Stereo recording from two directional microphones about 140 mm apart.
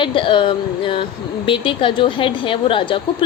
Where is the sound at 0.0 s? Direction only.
35° left (ahead or behind).